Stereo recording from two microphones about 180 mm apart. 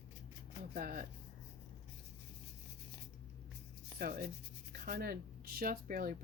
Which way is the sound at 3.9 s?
55° right (ahead or behind).